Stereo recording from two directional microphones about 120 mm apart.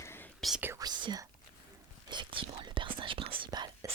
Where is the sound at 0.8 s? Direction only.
35° right (ahead or behind).